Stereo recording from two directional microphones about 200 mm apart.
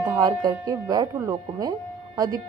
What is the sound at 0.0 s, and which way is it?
Speech, 20° right (ahead or behind).